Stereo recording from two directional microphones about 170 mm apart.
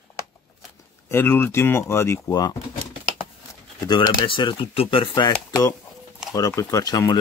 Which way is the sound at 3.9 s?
30° left (ahead or behind).